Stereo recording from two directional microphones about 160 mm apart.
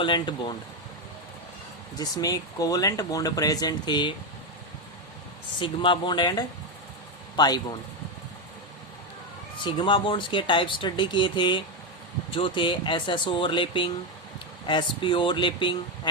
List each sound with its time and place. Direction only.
0.0 s speech: 30° left (ahead or behind)
2.0 s speech: 25° left (ahead or behind)
5.5 s speech: 30° left (ahead or behind)
9.6 s speech: 30° left (ahead or behind)